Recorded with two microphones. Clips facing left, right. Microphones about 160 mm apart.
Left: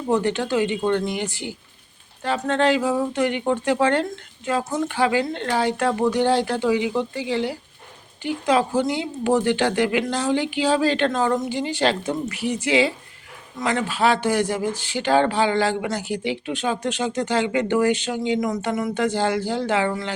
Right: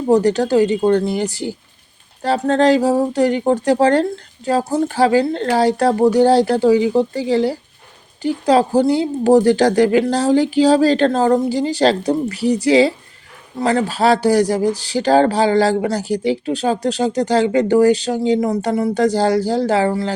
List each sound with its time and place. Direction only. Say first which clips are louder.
0.1 s speech: right 7 dB; 40° right (ahead or behind)